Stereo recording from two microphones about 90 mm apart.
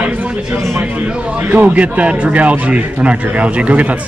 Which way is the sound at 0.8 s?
15° right (ahead or behind).